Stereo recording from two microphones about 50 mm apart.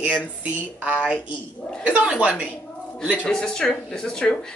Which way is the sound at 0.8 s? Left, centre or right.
Right.